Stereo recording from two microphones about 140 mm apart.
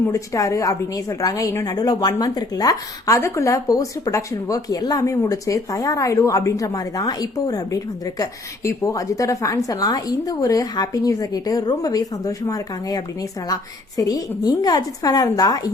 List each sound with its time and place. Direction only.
0.0 s a woman's voice: 25° left (ahead or behind)